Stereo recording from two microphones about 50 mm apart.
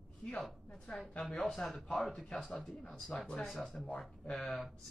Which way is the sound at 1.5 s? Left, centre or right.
Centre.